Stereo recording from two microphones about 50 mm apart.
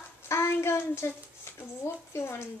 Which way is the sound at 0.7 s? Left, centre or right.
Left.